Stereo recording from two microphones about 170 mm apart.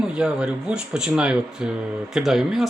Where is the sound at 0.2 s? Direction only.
5° right (ahead or behind).